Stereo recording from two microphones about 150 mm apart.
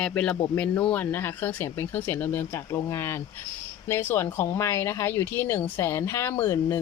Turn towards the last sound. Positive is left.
turn(degrees=15)  # may be behind; listen again after turning